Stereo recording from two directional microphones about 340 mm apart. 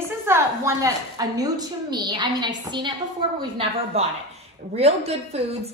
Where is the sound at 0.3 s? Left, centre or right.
Centre.